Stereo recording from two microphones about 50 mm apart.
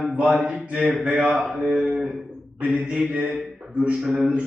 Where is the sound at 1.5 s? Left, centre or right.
Centre.